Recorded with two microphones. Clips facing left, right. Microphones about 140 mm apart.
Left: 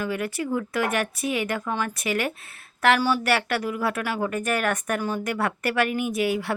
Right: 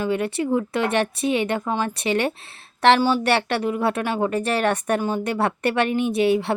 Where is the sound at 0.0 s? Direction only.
25° right (ahead or behind).